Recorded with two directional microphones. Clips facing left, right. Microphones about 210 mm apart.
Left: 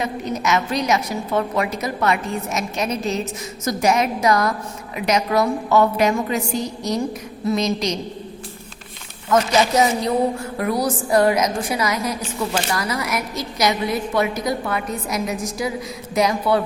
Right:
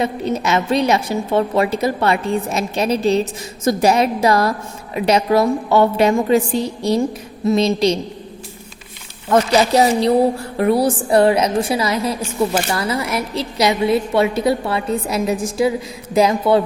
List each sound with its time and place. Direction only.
0.0 s a woman's voice: 30° right (ahead or behind)
9.3 s a woman's voice: 35° right (ahead or behind)